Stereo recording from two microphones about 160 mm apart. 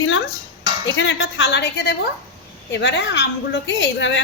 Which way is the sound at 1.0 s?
90° left.